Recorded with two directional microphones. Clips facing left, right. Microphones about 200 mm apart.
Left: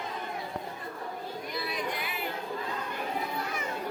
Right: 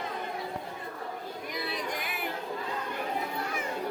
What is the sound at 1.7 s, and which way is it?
Music, 45° right (ahead or behind).